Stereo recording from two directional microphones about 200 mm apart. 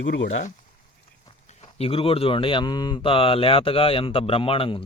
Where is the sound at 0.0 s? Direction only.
65° left (ahead or behind).